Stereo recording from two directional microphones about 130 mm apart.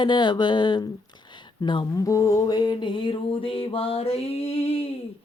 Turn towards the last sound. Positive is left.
turn(degrees=50)  # may be behind; listen again after turning